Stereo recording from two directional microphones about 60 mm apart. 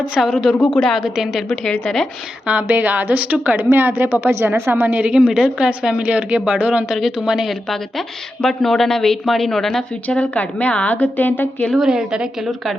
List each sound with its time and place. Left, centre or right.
0.2 s speech: centre
1.1 s speech: centre
1.6 s speech: centre
2.5 s speech: right
5.1 s a woman's voice: centre
6.8 s speech: centre
7.7 s speech: centre
10.1 s a woman's voice: left
11.9 s a woman's voice: centre